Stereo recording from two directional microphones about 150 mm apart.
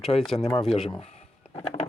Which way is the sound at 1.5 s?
45° left (ahead or behind).